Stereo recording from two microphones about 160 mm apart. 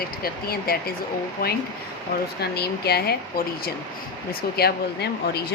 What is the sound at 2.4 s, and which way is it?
Speech, 90° left.